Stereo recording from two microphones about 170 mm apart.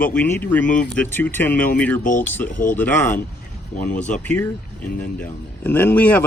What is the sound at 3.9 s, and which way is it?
Speech, 45° left (ahead or behind).